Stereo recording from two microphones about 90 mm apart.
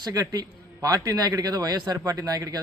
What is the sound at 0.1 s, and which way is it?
A man's voice, 45° right (ahead or behind).